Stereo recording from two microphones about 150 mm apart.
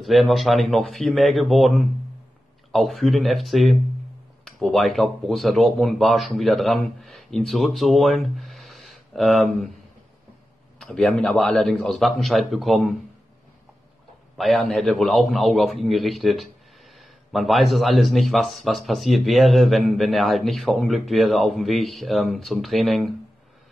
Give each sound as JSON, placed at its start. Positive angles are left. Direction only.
{"t": 0.0, "sound": "speech", "side_deg": 0}
{"t": 10.8, "sound": "speech", "side_deg": 5}
{"t": 14.3, "sound": "speech", "side_deg": 0}